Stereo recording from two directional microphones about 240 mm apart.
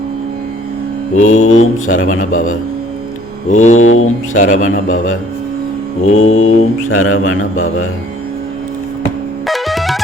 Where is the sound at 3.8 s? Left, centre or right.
Left.